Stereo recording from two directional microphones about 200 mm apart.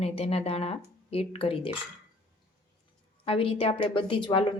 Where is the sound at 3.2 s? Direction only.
30° left (ahead or behind).